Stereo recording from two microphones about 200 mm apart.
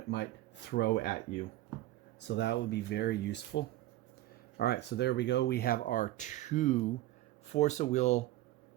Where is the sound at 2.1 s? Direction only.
60° left (ahead or behind); by 8.2 s 35° left (ahead or behind).